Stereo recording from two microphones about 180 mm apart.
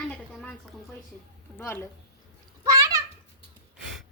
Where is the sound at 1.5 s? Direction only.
10° left (ahead or behind).